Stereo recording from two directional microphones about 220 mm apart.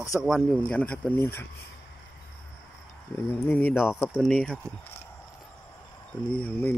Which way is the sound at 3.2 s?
10° left (ahead or behind).